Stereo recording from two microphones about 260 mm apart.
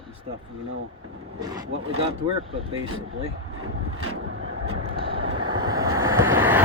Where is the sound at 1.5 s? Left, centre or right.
Right.